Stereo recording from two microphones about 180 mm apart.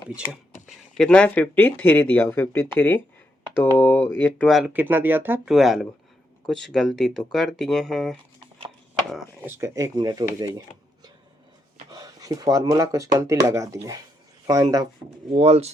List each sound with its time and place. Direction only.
0.9 s speech: 5° left (ahead or behind)
8.4 s chopping: 30° right (ahead or behind)
9.0 s speech: centre (ahead or behind)
9.5 s speech: 15° right (ahead or behind)
11.9 s speech: 20° right (ahead or behind)
15.3 s speech: 30° right (ahead or behind)